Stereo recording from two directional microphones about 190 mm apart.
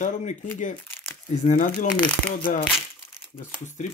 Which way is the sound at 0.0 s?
35° left (ahead or behind).